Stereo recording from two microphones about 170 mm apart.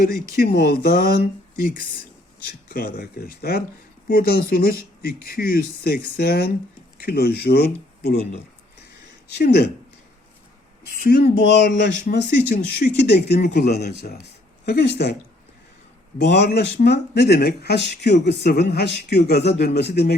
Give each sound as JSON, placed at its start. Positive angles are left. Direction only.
{"t": 0.3, "sound": "speech", "side_deg": 65}
{"t": 9.3, "sound": "speech", "side_deg": 65}
{"t": 10.8, "sound": "speech", "side_deg": 70}
{"t": 16.3, "sound": "speech", "side_deg": 70}